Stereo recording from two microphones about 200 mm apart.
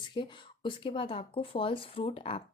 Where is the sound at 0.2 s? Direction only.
25° left (ahead or behind).